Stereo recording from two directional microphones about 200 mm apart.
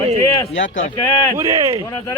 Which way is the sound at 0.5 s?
70° left (ahead or behind).